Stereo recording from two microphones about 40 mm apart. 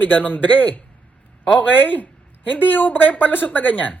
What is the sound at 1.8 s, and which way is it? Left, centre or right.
A woman's voice, left.